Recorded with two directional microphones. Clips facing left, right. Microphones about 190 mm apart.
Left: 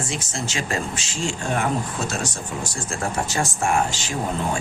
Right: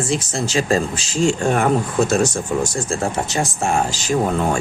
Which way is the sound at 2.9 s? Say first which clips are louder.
Right 4 dB; 20° right (ahead or behind).